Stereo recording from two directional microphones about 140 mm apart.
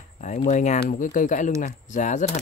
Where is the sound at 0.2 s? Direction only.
65° left (ahead or behind).